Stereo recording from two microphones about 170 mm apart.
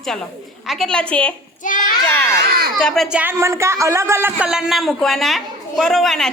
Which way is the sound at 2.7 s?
Centre (ahead or behind).